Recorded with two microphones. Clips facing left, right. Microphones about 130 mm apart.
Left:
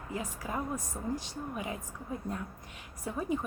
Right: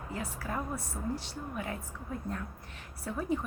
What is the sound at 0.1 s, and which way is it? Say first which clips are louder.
Speech: left 1 dB; 15° left (ahead or behind).